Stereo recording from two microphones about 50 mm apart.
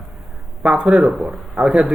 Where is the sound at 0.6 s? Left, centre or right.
Centre.